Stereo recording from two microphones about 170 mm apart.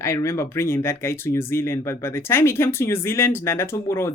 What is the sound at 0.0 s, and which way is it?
Speech, 15° left (ahead or behind).